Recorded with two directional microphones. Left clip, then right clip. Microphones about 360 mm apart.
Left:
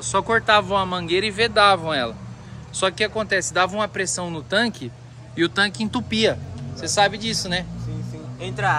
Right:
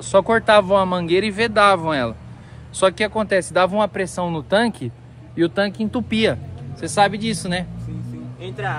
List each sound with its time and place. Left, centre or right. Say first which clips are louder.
0.0 s speech: right 4 dB; centre
6.0 s speech: even; centre
8.4 s speech: left 5 dB; left